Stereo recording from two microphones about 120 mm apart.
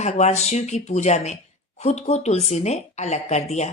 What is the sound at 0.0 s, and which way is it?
Speech, 70° left (ahead or behind).